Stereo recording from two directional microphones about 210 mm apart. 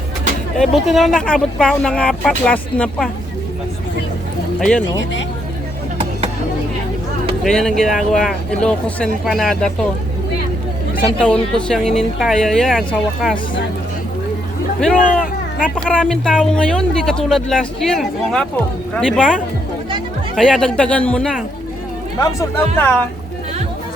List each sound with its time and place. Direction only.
0.6 s speech: centre (ahead or behind)
7.4 s speech: centre (ahead or behind)
11.2 s speech: 5° left (ahead or behind)
14.9 s vehicle: 40° left (ahead or behind)
15.7 s speech: 5° left (ahead or behind)